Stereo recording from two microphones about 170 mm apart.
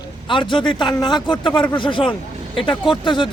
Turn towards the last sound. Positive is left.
turn(degrees=30)  # may be behind; listen again after turning